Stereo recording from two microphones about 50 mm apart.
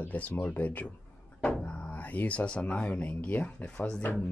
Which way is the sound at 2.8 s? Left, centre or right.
Left.